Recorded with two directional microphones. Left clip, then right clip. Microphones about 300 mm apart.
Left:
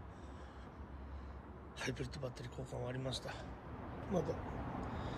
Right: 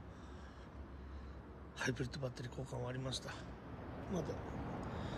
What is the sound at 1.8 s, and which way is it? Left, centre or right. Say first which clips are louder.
Speech: right 2 dB; centre.